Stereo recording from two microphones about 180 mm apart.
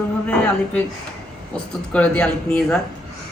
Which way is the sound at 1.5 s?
5° left (ahead or behind).